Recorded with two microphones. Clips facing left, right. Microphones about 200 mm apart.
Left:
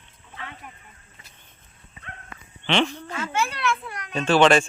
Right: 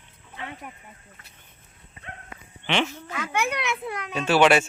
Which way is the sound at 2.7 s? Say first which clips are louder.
Left 3 dB; 10° right (ahead or behind).